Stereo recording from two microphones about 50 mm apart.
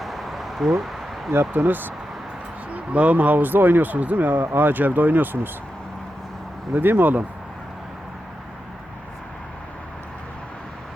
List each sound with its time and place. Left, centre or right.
0.0 s a sound: centre
1.5 s speech: right
2.7 s speech: right
6.7 s speech: right